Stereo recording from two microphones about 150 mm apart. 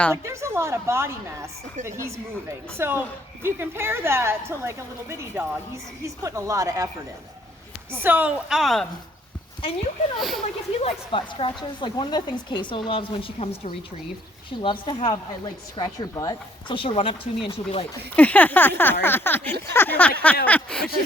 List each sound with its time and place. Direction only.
0.1 s a woman's voice: 20° right (ahead or behind); by 8.9 s centre (ahead or behind)
10.2 s a woman's voice: centre (ahead or behind)
10.8 s speech: 40° left (ahead or behind)
18.2 s speech: 10° left (ahead or behind)